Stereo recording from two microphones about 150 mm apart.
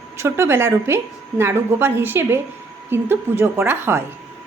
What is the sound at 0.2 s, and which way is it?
A woman's voice, 15° right (ahead or behind).